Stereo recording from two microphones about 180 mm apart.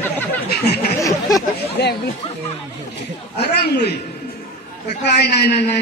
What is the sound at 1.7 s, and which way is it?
Speech, 65° left (ahead or behind).